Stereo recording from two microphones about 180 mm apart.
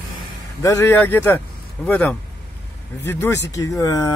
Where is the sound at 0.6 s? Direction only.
15° left (ahead or behind).